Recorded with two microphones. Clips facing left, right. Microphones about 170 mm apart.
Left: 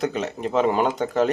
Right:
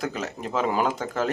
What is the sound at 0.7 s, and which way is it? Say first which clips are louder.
Speech: left 3 dB; centre (ahead or behind).